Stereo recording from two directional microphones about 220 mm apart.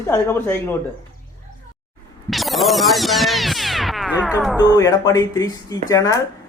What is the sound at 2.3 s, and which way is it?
Music, centre (ahead or behind).